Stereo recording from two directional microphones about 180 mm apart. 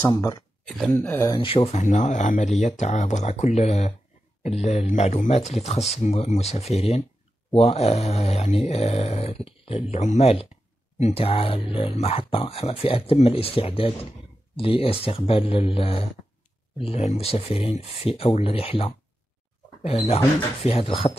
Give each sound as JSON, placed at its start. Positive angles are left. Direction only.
{"t": 0.0, "sound": "speech", "side_deg": 20}
{"t": 0.7, "sound": "speech", "side_deg": 0}
{"t": 0.9, "sound": "speech", "side_deg": 15}